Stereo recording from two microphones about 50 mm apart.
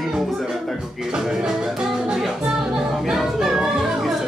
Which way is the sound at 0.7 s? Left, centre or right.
Centre.